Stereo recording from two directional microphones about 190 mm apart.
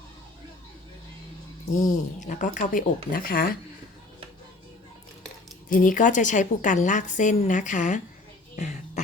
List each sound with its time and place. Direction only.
1.9 s speech: 40° left (ahead or behind)
5.6 s a woman's voice: 45° left (ahead or behind)